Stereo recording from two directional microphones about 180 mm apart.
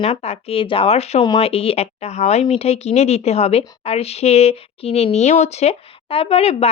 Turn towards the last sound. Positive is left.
turn(degrees=35)  # may be behind; listen again after turning